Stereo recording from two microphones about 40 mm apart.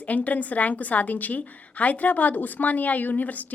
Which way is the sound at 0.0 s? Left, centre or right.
Left.